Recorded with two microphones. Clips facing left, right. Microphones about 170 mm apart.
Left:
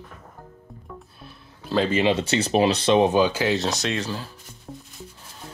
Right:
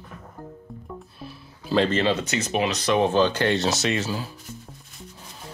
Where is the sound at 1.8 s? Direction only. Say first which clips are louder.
Left 1 dB; 10° left (ahead or behind).